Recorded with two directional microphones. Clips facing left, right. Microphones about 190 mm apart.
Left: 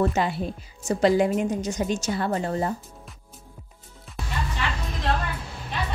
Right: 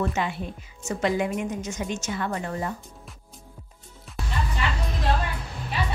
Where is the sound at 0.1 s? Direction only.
35° left (ahead or behind).